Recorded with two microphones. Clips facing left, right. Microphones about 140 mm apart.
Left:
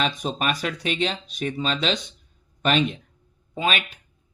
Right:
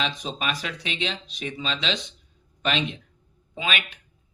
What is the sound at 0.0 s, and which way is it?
Speech, 50° left (ahead or behind).